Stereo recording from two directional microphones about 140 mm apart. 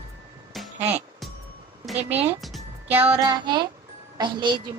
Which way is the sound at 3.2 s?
35° right (ahead or behind).